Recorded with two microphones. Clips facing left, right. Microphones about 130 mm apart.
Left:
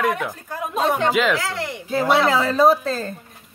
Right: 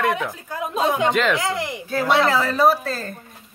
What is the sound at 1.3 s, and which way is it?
Speech, 20° right (ahead or behind).